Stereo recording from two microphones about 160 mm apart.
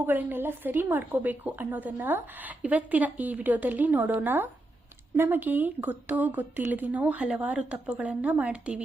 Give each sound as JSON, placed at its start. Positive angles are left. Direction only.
{"t": 0.0, "sound": "a woman's voice", "side_deg": -10}